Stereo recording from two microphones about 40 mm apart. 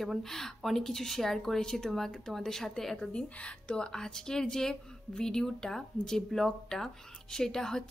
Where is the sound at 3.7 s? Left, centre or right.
Centre.